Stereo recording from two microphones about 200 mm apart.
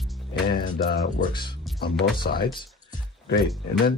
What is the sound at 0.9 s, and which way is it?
Speech, 40° left (ahead or behind).